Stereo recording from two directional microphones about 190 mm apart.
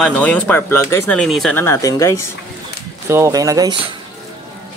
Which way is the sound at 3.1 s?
15° right (ahead or behind).